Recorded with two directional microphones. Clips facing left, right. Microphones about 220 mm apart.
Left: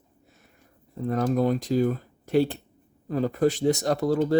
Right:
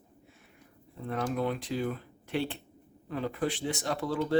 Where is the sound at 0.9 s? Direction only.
40° left (ahead or behind).